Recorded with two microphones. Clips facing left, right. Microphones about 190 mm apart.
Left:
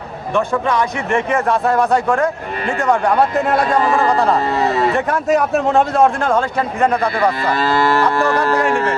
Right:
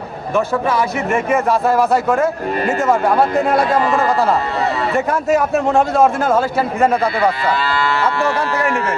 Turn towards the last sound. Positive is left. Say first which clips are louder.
# left 2 dB
turn(degrees=45)  # may be behind; listen again after turning